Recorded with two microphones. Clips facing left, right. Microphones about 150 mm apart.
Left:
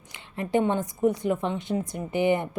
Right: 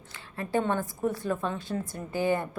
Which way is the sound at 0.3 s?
20° left (ahead or behind).